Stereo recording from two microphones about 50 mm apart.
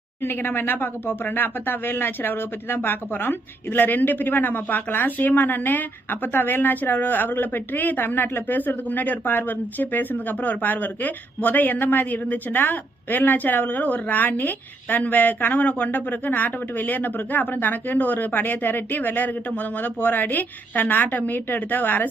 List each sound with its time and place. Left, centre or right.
0.2 s speech: left